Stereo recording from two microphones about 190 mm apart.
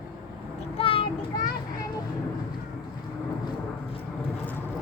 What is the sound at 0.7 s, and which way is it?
Child singing, 30° left (ahead or behind).